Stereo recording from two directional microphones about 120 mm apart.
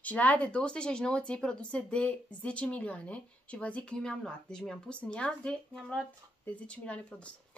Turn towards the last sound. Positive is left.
turn(degrees=10)  # may be behind; listen again after turning